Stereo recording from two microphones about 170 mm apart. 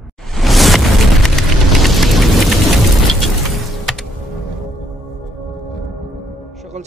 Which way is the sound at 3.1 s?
Centre (ahead or behind).